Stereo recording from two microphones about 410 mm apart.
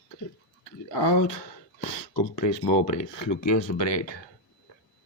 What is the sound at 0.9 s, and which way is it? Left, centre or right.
Speech, left.